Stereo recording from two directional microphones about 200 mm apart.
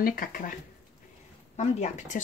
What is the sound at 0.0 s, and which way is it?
Speech, 45° left (ahead or behind).